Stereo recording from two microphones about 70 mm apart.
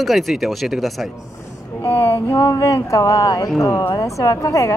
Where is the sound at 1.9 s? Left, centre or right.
Left.